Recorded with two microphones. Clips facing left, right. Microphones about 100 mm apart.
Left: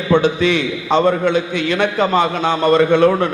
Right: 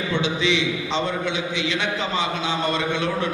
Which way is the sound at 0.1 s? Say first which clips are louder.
Left 10 dB; 50° left (ahead or behind).